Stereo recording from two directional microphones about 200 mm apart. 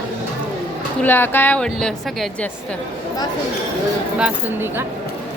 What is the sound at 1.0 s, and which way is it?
A woman's voice, 10° left (ahead or behind).